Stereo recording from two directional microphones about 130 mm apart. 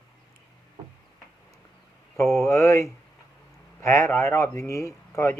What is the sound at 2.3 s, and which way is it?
Speech, 25° left (ahead or behind).